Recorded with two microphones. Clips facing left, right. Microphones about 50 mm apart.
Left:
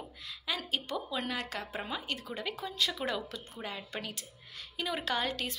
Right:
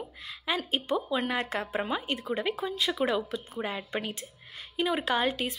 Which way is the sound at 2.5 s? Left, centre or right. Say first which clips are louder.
Right 4 dB; centre.